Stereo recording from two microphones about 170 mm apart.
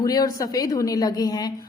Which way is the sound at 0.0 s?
20° left (ahead or behind).